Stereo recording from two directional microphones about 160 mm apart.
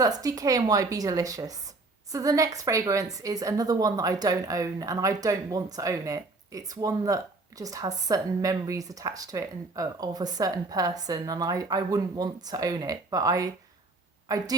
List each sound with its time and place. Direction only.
0.0 s a woman's voice: 20° right (ahead or behind)